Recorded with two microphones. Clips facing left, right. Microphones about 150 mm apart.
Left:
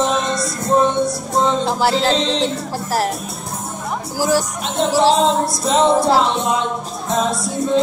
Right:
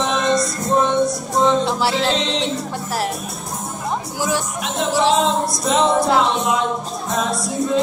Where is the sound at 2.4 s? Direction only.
40° left (ahead or behind).